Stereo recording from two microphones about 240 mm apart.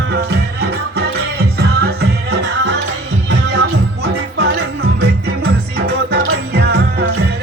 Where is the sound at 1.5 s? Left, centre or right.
Right.